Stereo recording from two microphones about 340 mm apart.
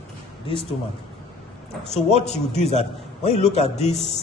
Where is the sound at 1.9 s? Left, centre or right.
Centre.